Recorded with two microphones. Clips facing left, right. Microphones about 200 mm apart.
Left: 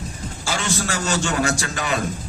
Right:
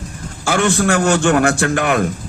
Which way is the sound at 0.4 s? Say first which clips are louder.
Right 10 dB; 55° right (ahead or behind).